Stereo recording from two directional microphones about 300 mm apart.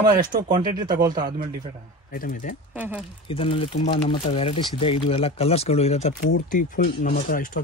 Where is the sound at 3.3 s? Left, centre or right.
Centre.